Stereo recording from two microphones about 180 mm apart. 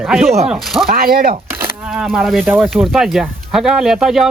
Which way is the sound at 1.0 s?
55° right (ahead or behind).